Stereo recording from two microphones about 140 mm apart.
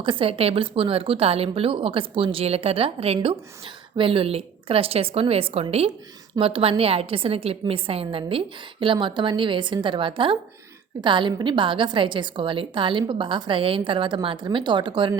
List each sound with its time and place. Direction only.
0.0 s a woman's voice: 40° right (ahead or behind)